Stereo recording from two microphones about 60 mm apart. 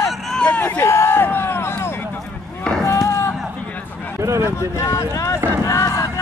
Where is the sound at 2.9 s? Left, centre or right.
Left.